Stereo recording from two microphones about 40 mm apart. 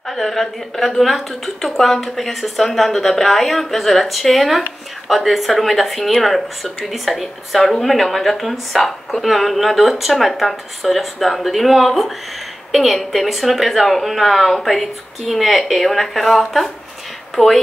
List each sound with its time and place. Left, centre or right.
0.1 s a woman's voice: centre